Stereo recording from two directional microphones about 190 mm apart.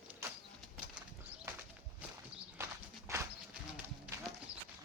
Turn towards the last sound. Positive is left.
turn(degrees=-15)  # may be behind; listen again after turning